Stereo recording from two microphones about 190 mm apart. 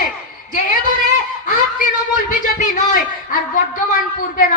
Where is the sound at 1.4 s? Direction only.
45° left (ahead or behind).